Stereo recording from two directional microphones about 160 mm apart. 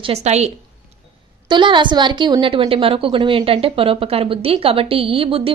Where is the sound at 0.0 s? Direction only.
40° right (ahead or behind).